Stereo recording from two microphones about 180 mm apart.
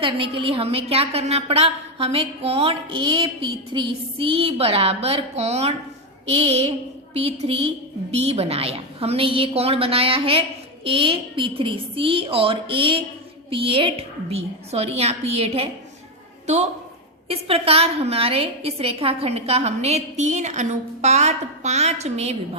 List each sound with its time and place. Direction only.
0.0 s a woman's voice: 30° right (ahead or behind)
17.2 s a woman's voice: 30° right (ahead or behind)